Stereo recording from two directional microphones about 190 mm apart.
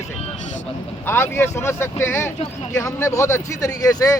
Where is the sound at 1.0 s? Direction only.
10° left (ahead or behind).